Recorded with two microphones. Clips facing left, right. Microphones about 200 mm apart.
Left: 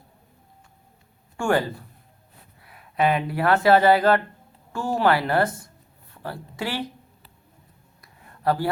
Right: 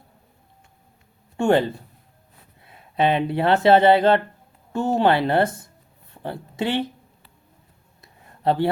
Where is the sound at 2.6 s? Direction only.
25° right (ahead or behind).